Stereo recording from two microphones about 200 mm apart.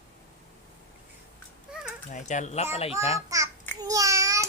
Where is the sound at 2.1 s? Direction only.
40° left (ahead or behind).